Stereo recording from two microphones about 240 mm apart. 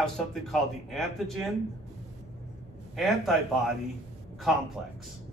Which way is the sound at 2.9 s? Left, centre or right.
Centre.